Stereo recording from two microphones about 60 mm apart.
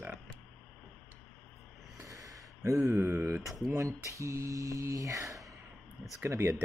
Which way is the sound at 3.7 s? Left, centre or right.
Right.